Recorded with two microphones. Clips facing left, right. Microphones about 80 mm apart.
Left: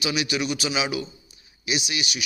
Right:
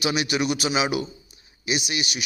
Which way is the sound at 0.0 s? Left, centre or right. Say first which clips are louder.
Right 2 dB; right.